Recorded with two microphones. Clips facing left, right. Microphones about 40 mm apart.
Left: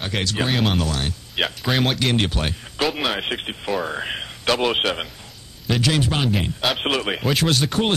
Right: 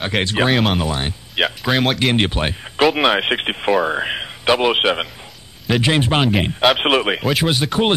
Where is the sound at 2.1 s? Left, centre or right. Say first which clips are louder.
Right 4 dB; right.